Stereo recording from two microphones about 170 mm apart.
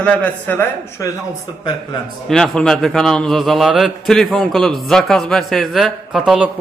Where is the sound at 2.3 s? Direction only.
5° left (ahead or behind).